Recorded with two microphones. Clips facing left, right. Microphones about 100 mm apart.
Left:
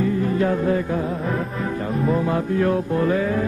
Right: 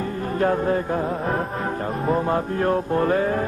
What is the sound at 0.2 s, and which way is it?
Music, 40° right (ahead or behind).